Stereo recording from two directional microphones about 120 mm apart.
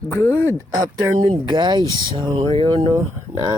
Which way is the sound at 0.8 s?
40° right (ahead or behind).